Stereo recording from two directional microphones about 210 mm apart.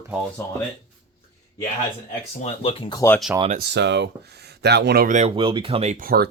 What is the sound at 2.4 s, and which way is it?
Speech, 25° left (ahead or behind).